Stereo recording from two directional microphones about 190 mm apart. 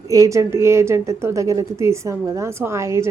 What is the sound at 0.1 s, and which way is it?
A woman's voice, 15° right (ahead or behind).